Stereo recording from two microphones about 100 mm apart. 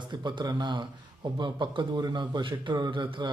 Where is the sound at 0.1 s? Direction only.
50° right (ahead or behind).